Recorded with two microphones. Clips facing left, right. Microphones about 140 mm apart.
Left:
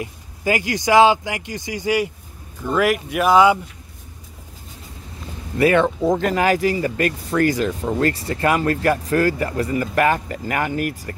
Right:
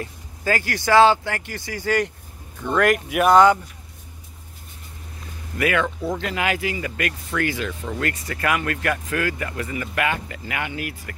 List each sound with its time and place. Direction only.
0.0 s speech: 15° left (ahead or behind)
5.6 s speech: 30° left (ahead or behind)